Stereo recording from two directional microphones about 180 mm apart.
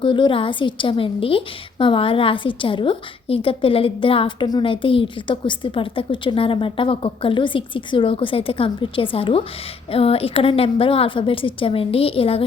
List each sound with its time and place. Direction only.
0.0 s a woman's voice: 30° left (ahead or behind)